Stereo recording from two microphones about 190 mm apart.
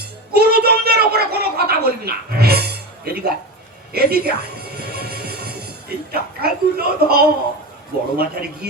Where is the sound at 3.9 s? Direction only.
55° right (ahead or behind).